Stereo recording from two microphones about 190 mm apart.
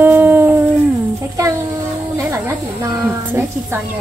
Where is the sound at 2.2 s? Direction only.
10° right (ahead or behind).